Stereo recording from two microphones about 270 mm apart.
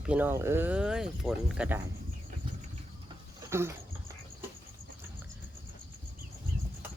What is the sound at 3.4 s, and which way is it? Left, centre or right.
Dog, centre.